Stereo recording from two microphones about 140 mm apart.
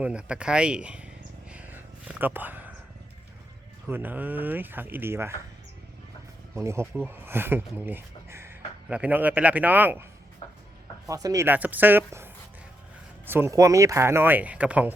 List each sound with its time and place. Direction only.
0.0 s a sound: 10° right (ahead or behind)
3.8 s speech: 15° right (ahead or behind)
6.6 s speech: 20° right (ahead or behind)
10.4 s music: 50° left (ahead or behind)
11.1 s speech: 25° right (ahead or behind)
11.4 s speech: 10° right (ahead or behind)